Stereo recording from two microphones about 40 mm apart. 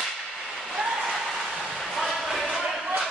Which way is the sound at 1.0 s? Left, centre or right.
Centre.